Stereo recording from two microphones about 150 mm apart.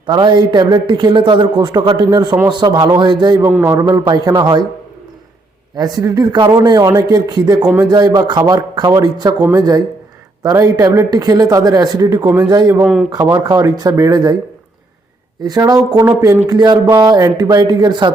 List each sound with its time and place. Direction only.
0.0 s a man's voice: 30° right (ahead or behind)
3.4 s a man's voice: 15° right (ahead or behind)
5.7 s speech: 25° right (ahead or behind)
12.8 s a man's voice: 5° right (ahead or behind)
13.2 s speech: 25° right (ahead or behind)
15.4 s speech: 25° right (ahead or behind)